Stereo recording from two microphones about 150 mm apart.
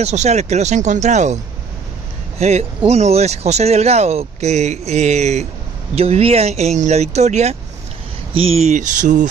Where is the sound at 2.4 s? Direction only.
45° right (ahead or behind).